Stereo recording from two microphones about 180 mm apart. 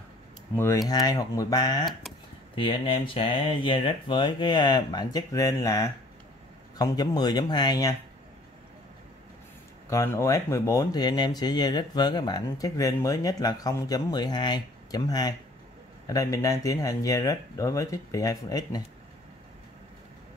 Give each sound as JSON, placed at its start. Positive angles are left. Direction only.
{"t": 0.6, "sound": "speech", "side_deg": 15}
{"t": 9.8, "sound": "speech", "side_deg": 15}